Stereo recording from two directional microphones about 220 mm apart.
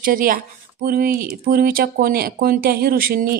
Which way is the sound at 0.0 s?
40° right (ahead or behind).